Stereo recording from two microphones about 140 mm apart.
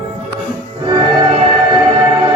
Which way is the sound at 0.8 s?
35° right (ahead or behind).